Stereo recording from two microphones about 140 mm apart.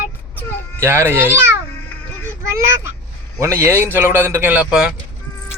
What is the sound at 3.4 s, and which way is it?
A man's voice, 15° right (ahead or behind).